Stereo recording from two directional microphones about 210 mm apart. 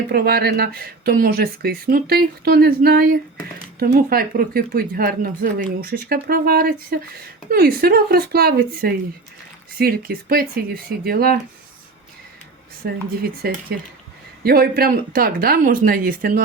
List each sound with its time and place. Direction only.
0.1 s speech: 45° right (ahead or behind)
12.8 s speech: 45° right (ahead or behind)